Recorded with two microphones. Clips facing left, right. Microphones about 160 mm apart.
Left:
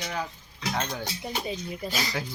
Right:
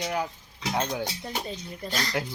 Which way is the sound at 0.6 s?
25° right (ahead or behind).